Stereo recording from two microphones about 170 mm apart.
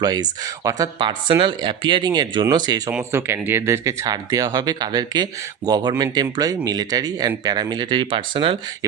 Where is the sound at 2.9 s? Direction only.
10° right (ahead or behind).